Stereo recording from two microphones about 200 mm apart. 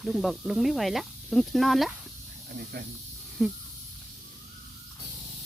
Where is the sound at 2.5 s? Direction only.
50° right (ahead or behind).